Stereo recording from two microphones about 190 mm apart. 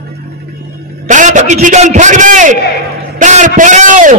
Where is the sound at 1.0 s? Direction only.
40° right (ahead or behind).